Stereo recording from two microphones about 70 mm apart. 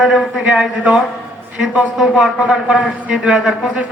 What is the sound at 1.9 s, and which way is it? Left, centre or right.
Speech, centre.